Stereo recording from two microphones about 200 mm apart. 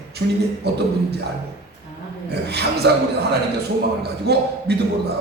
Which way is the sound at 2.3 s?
55° right (ahead or behind).